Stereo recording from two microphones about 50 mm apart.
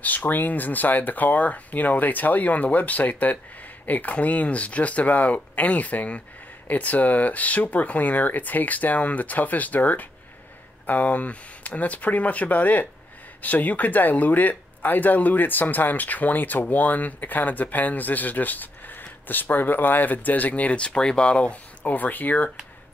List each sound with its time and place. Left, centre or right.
0.0 s speech: left
21.9 s speech: left